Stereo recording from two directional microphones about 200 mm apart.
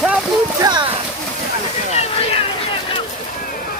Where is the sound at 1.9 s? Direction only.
30° left (ahead or behind).